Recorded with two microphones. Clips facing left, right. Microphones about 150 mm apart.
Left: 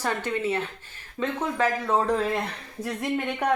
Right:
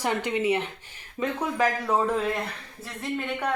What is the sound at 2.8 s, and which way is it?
Speech, 15° left (ahead or behind).